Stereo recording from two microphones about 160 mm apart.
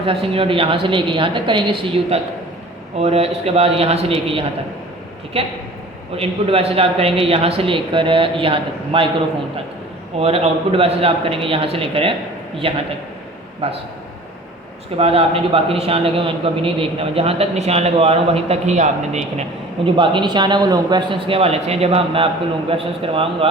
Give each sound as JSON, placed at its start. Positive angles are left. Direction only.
{"t": 0.0, "sound": "a man's voice", "side_deg": -35}
{"t": 6.1, "sound": "a man's voice", "side_deg": -35}
{"t": 10.2, "sound": "a man's voice", "side_deg": -40}
{"t": 14.9, "sound": "a man's voice", "side_deg": -40}
{"t": 20.0, "sound": "a man's voice", "side_deg": -30}